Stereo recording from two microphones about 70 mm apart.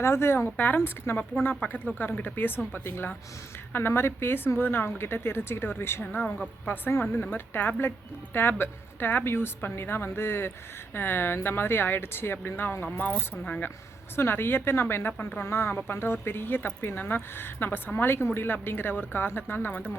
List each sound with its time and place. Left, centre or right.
0.0 s speech: left
6.1 s speech: centre
14.2 s speech: left